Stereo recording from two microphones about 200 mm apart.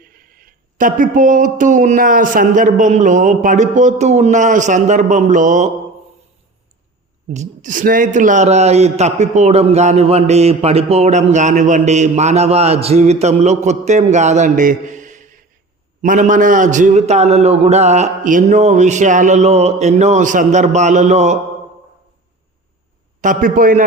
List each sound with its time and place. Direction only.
0.0 s speech: 45° right (ahead or behind)
7.3 s speech: 40° right (ahead or behind)
23.2 s speech: 40° right (ahead or behind)